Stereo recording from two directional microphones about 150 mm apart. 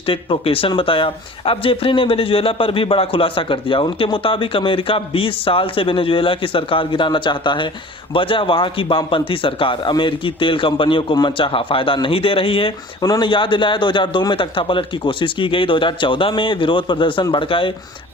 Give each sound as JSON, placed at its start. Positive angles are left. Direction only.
{"t": 0.0, "sound": "speech", "side_deg": 35}